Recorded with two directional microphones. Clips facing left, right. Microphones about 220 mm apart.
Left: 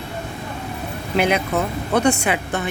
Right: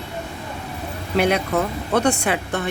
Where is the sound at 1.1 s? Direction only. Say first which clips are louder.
Even; centre (ahead or behind).